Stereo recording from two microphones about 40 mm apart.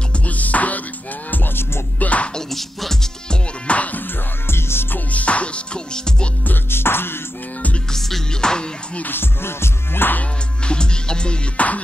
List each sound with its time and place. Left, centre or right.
0.3 s music: left
1.3 s music: left
2.0 s music: left
2.5 s music: centre
3.3 s music: left
4.5 s music: left
4.9 s music: left
5.9 s music: centre
6.7 s music: left
7.9 s music: centre
9.0 s music: left
10.7 s music: left
11.5 s music: left